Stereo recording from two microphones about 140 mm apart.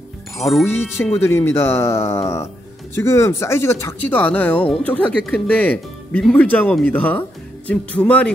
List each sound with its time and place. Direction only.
0.5 s speech: centre (ahead or behind)
1.2 s speech: 15° left (ahead or behind)